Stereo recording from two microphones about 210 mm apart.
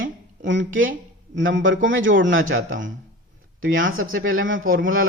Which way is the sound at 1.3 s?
60° right (ahead or behind).